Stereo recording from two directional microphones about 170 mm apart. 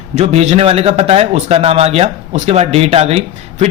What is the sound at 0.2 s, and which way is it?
Speech, 40° right (ahead or behind).